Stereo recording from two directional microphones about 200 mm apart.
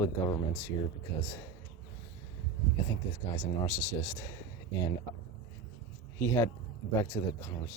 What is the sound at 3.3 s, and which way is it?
Speech, 10° left (ahead or behind).